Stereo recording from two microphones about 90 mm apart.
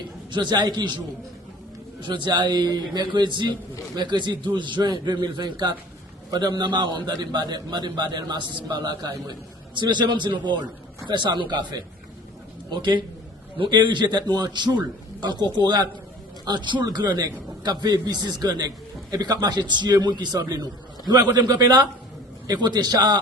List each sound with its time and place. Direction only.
0.3 s a man's voice: 60° right (ahead or behind)
9.7 s a man's voice: 60° right (ahead or behind)